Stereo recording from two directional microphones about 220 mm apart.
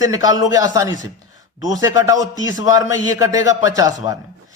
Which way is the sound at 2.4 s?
60° left (ahead or behind).